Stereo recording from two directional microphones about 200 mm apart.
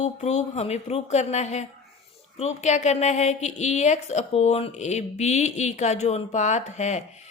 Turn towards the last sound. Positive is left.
turn(degrees=35)  # may be behind; listen again after turning